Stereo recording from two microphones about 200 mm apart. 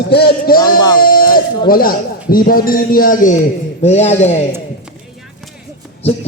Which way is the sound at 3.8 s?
35° left (ahead or behind).